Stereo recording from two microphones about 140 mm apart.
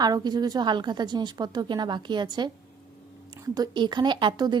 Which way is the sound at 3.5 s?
30° right (ahead or behind).